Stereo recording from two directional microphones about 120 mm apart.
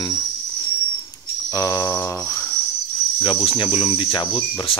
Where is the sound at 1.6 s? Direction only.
25° left (ahead or behind).